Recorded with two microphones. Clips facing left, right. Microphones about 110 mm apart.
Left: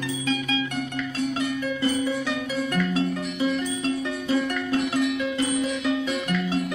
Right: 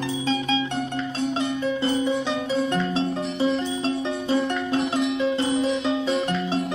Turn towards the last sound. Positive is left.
turn(degrees=-30)  # may be behind; listen again after turning